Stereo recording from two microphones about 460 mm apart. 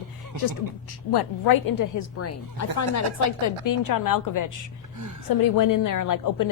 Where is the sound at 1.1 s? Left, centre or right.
Left.